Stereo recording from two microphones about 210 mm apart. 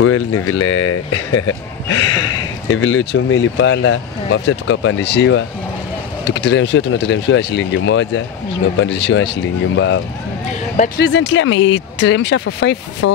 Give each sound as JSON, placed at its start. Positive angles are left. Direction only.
{"t": 0.0, "sound": "speech", "side_deg": 90}
{"t": 11.0, "sound": "speech", "side_deg": 60}
{"t": 12.4, "sound": "speech", "side_deg": 90}
{"t": 13.0, "sound": "speech", "side_deg": 75}